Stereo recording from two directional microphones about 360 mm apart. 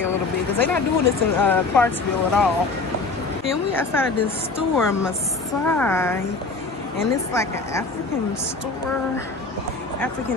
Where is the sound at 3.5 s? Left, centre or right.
Centre.